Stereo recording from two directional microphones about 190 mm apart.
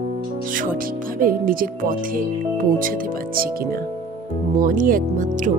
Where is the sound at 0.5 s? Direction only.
45° right (ahead or behind).